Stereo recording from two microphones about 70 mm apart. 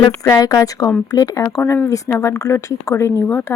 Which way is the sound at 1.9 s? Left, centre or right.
Left.